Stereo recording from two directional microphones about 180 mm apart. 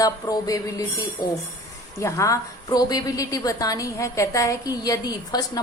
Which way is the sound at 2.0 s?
15° left (ahead or behind).